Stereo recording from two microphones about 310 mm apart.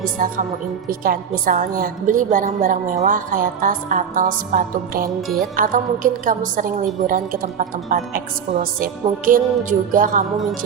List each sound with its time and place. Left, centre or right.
0.0 s a woman's voice: right